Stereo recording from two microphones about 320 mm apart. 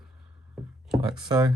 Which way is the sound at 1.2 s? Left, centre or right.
Centre.